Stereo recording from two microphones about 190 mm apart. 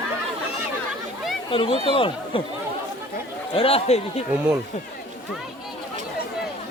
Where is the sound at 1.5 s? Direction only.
25° left (ahead or behind).